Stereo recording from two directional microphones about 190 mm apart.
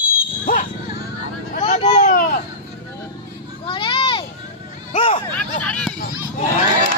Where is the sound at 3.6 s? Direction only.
25° left (ahead or behind).